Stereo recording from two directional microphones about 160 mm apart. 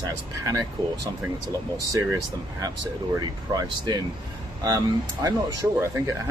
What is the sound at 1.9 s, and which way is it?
Speech, 20° right (ahead or behind).